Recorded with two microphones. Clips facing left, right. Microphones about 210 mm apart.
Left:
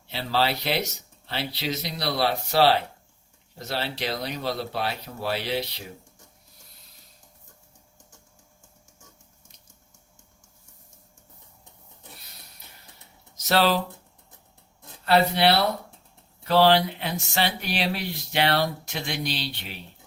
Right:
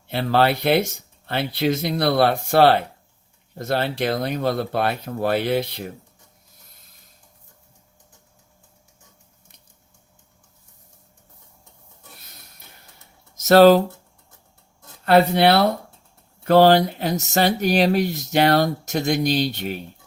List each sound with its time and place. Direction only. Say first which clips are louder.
0.1 s speech: right 7 dB; 55° right (ahead or behind)
13.3 s speech: right 11 dB; 45° right (ahead or behind)
15.0 s speech: right 5 dB; 50° right (ahead or behind)